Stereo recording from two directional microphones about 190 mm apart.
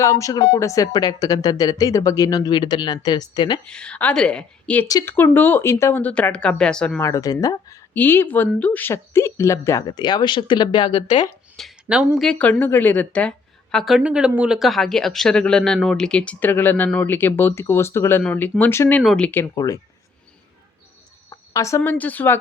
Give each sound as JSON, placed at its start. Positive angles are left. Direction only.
{"t": 0.0, "sound": "speech", "side_deg": 15}
{"t": 3.7, "sound": "a woman's voice", "side_deg": 5}
{"t": 7.0, "sound": "speech", "side_deg": 15}
{"t": 11.5, "sound": "a woman's voice", "side_deg": 0}
{"t": 21.2, "sound": "speech", "side_deg": 15}